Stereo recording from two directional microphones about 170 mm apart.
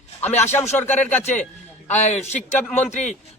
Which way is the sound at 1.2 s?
45° left (ahead or behind).